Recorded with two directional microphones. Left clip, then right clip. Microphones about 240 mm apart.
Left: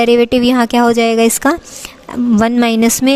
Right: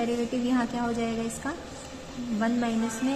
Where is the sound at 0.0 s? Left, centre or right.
Left.